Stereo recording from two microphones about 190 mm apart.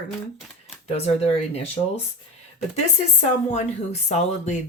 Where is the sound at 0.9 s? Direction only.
35° left (ahead or behind).